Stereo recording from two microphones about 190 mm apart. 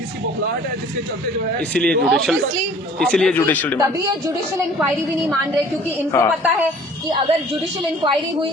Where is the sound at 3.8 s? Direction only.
15° right (ahead or behind).